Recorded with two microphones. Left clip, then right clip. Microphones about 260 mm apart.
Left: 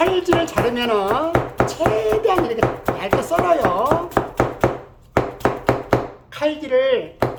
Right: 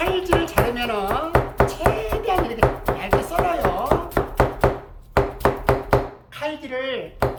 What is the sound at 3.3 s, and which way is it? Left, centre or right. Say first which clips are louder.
Speech: left 5 dB; centre.